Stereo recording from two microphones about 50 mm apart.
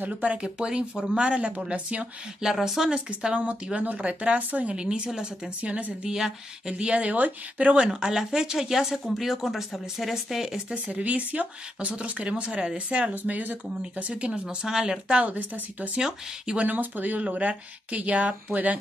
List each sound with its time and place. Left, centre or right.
0.0 s speech: right
2.6 s speech: centre
3.2 s speech: right
4.8 s speech: centre
5.6 s speech: right
6.0 s speech: centre
7.9 s speech: centre
10.9 s speech: right
13.3 s speech: right
16.0 s speech: centre
16.5 s speech: right